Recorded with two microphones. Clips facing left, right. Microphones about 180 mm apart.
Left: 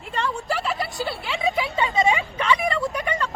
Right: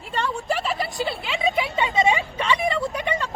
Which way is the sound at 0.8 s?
20° right (ahead or behind).